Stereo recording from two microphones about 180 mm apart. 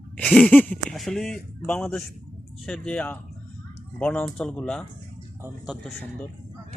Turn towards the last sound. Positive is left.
turn(degrees=0)  # may be behind; listen again after turning